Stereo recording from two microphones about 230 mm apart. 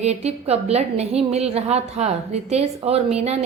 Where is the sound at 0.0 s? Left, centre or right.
Right.